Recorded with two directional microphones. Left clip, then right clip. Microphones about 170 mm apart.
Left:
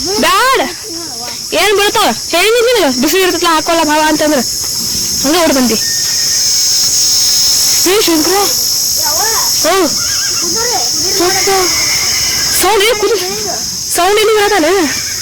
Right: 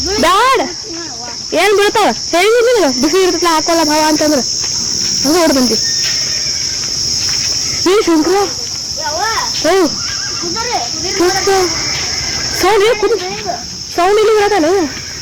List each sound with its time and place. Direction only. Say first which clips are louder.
0.2 s snake: even; centre (ahead or behind)
1.5 s speech: even; 5° right (ahead or behind); by 5.6 s 20° left (ahead or behind)
7.9 s speech: right 2 dB; centre (ahead or behind)
9.6 s speech: right 1 dB; 10° left (ahead or behind)
12.6 s speech: right 1 dB; 10° left (ahead or behind); by 14.8 s 25° left (ahead or behind)